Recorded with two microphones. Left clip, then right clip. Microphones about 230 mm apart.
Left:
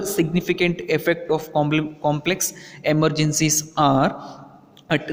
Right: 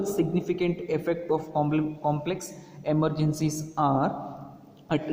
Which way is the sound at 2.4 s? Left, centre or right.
Left.